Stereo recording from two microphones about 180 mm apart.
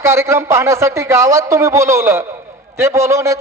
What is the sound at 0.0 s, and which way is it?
A man's voice, 15° right (ahead or behind).